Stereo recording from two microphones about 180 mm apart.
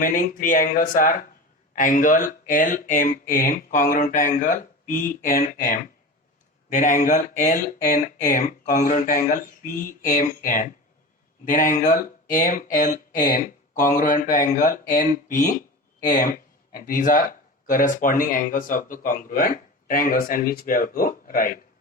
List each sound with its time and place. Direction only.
0.0 s speech: 50° left (ahead or behind)